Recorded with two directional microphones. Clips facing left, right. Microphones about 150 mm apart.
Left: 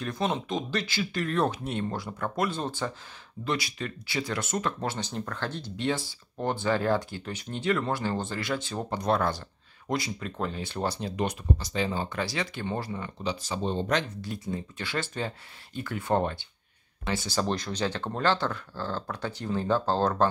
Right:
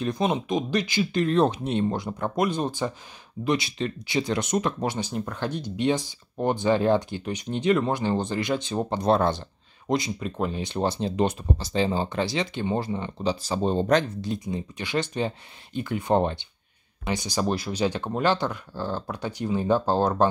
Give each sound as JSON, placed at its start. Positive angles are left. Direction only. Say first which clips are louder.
{"t": 0.0, "sound": "speech", "louder": "right 4 dB", "side_deg": -15}
{"t": 14.2, "sound": "speech", "louder": "right 4 dB", "side_deg": -20}